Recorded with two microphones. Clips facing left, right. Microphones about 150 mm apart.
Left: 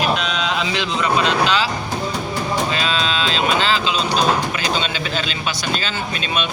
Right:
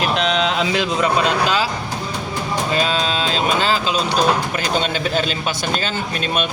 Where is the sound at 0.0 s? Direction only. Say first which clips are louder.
Right 2 dB; 50° right (ahead or behind).